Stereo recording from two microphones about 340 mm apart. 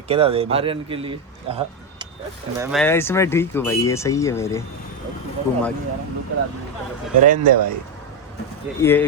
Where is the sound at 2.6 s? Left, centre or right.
Centre.